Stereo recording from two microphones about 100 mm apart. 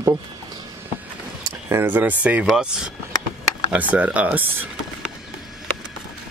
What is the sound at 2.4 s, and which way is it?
Speech, 5° right (ahead or behind).